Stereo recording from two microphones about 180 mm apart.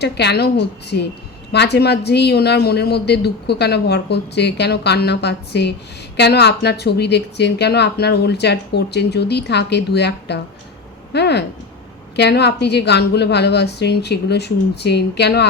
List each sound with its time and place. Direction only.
0.0 s speech: 70° left (ahead or behind)